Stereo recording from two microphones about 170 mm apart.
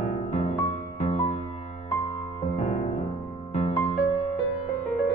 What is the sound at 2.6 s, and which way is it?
Music, 40° left (ahead or behind).